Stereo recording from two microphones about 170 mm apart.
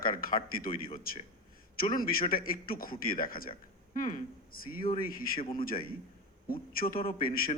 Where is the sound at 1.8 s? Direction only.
55° left (ahead or behind).